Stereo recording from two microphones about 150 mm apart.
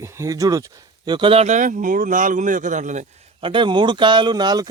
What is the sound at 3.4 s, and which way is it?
Speech, 35° right (ahead or behind).